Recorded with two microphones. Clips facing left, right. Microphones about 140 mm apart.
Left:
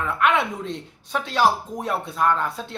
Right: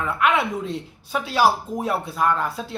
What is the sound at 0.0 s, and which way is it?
Speech, centre (ahead or behind).